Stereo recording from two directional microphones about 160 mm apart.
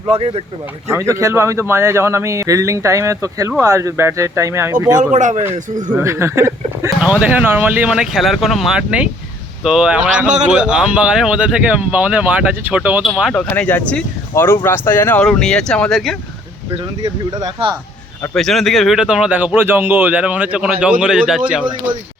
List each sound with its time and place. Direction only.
0.1 s speech: 40° right (ahead or behind)
0.9 s a man's voice: 20° right (ahead or behind)
5.1 s speech: 45° right (ahead or behind)
5.9 s speech: 15° right (ahead or behind)
10.2 s speech: 45° right (ahead or behind)
10.5 s speech: 5° right (ahead or behind)
17.4 s speech: 35° right (ahead or behind)
18.3 s speech: centre (ahead or behind)